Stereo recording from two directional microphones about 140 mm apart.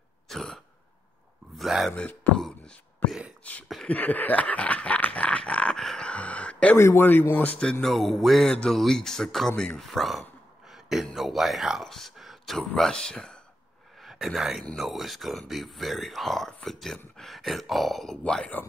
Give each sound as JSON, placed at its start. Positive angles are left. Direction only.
{"t": 0.3, "sound": "throat clearing", "side_deg": 5}
{"t": 1.5, "sound": "a sound", "side_deg": 0}
{"t": 3.7, "sound": "dog", "side_deg": 10}
{"t": 6.8, "sound": "a man's voice", "side_deg": 15}